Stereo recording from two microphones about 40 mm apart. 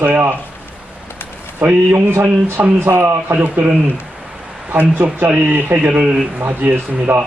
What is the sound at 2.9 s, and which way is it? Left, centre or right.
Speech, right.